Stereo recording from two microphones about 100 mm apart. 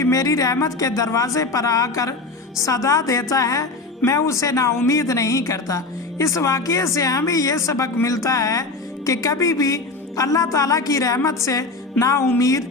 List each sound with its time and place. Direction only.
0.0 s a woman's voice: 35° left (ahead or behind)